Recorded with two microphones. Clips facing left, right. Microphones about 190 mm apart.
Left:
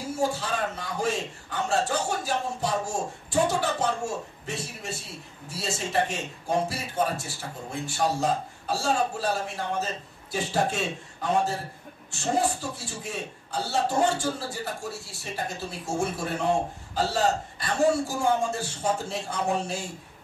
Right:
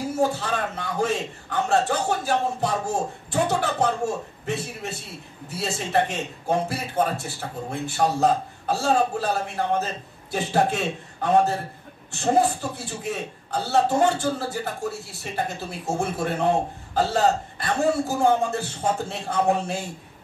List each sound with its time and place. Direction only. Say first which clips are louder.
0.2 s a man's voice: right 3 dB; 60° right (ahead or behind)